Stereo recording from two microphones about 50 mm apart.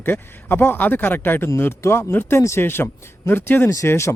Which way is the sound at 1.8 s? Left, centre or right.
Left.